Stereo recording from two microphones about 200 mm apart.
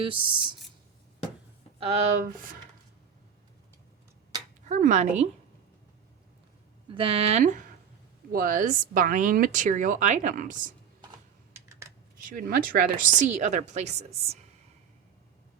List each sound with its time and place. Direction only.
0.0 s speech: 25° right (ahead or behind)
1.8 s speech: 35° right (ahead or behind)
4.7 s speech: 40° right (ahead or behind)
6.8 s speech: 25° right (ahead or behind)
12.3 s speech: 45° right (ahead or behind)